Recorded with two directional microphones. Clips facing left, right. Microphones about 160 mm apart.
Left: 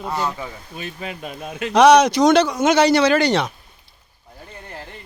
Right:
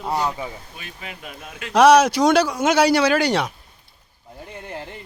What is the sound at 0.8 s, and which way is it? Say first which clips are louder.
Speech: left 7 dB; 30° left (ahead or behind).